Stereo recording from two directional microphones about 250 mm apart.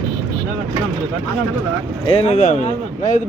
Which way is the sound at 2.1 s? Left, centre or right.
Left.